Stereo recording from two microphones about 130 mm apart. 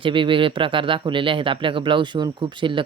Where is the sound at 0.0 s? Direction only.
40° right (ahead or behind).